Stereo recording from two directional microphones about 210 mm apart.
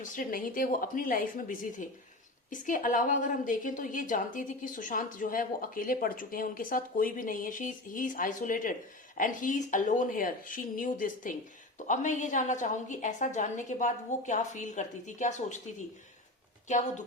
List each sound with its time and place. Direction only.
0.0 s a woman's voice: 40° left (ahead or behind)